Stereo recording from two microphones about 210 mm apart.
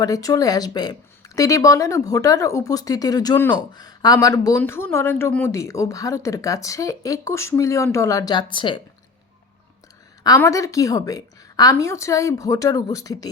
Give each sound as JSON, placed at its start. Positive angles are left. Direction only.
{"t": 0.0, "sound": "speech", "side_deg": 15}
{"t": 10.2, "sound": "speech", "side_deg": 15}